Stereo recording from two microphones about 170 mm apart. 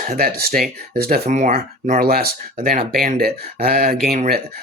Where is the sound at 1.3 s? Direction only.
50° right (ahead or behind); by 4.4 s 65° right (ahead or behind).